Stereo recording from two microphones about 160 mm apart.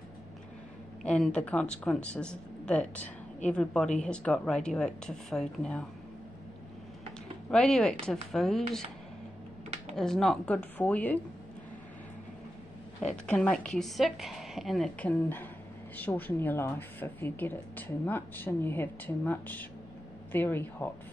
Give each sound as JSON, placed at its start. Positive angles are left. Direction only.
{"t": 1.0, "sound": "a woman's voice", "side_deg": 5}
{"t": 7.5, "sound": "a woman's voice", "side_deg": 5}
{"t": 9.9, "sound": "speech", "side_deg": 5}
{"t": 13.0, "sound": "a woman's voice", "side_deg": 5}